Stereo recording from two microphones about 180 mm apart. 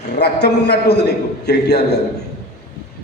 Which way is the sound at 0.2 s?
65° left (ahead or behind).